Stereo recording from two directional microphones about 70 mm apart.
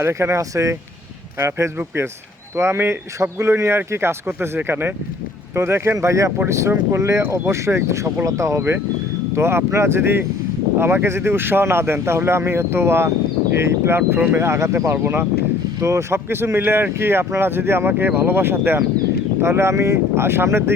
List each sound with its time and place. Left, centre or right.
0.0 s speech: right
15.0 s speech: right
15.8 s speech: right